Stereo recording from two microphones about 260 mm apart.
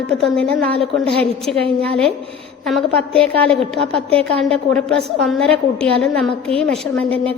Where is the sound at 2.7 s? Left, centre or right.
Centre.